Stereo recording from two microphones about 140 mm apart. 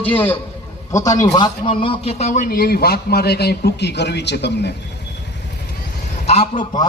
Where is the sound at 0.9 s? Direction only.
25° left (ahead or behind).